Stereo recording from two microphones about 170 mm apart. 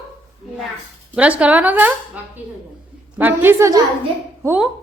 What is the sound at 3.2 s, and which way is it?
A woman's voice, 10° right (ahead or behind).